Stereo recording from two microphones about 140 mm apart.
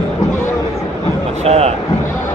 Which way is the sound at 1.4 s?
45° right (ahead or behind).